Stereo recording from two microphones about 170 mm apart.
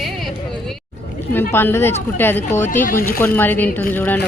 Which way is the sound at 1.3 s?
10° left (ahead or behind).